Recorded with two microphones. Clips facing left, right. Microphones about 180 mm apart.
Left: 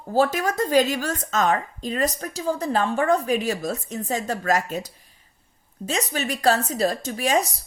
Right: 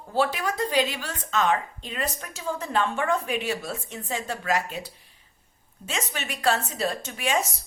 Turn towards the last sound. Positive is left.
turn(degrees=35)  # may be behind; listen again after turning